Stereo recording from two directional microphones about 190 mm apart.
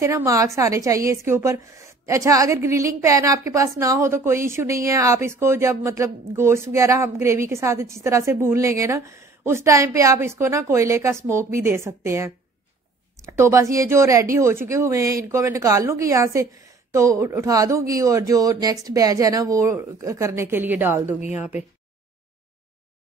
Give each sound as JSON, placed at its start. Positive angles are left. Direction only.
{"t": 0.0, "sound": "speech", "side_deg": -15}